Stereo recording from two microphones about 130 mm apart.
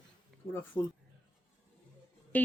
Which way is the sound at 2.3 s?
15° left (ahead or behind).